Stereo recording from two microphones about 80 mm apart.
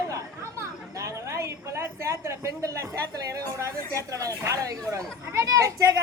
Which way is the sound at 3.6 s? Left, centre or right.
Right.